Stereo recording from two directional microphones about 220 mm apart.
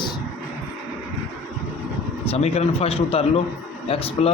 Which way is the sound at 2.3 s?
30° left (ahead or behind).